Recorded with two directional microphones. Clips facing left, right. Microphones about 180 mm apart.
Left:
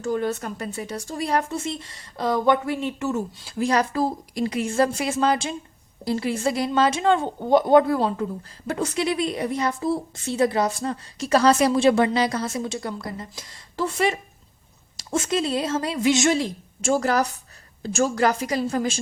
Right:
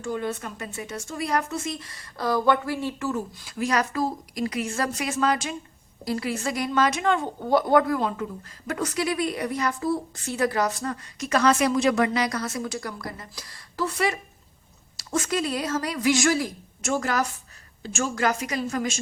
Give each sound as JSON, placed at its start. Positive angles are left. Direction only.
{"t": 0.0, "sound": "a woman's voice", "side_deg": 40}